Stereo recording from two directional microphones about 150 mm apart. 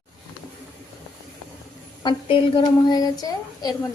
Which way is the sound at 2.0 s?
30° left (ahead or behind).